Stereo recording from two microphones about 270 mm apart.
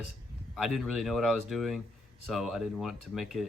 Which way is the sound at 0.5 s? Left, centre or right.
Centre.